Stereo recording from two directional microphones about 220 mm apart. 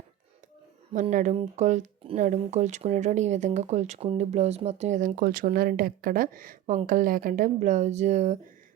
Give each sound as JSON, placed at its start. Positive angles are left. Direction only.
{"t": 0.9, "sound": "speech", "side_deg": -35}